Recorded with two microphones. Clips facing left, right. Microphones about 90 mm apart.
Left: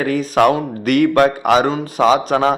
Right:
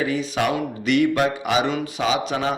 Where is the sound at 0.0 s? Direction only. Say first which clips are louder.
Left 8 dB; 50° left (ahead or behind).